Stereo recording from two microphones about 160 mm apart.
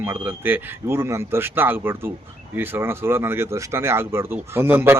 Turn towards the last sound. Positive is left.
turn(degrees=-15)  # may be behind; listen again after turning